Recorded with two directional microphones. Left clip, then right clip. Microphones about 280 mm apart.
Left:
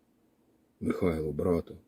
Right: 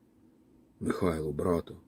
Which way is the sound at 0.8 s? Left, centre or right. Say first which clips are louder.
Left 1 dB; centre.